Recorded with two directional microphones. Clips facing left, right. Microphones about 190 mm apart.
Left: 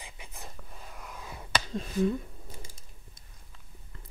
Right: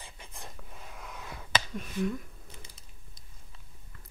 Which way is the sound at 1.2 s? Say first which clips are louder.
Even; 30° left (ahead or behind).